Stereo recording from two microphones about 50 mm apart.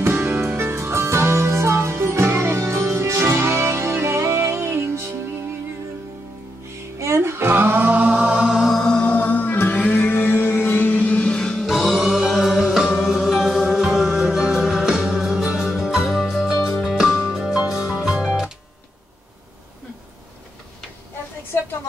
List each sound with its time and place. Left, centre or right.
0.1 s music: right
7.0 s a sound: right
8.1 s music: right
8.5 s music: centre
9.0 s music: left
9.9 s music: left; by 11.8 s centre
11.9 s music: centre